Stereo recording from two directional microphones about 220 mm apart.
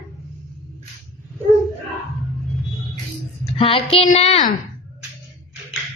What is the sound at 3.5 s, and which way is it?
Speech, 25° left (ahead or behind).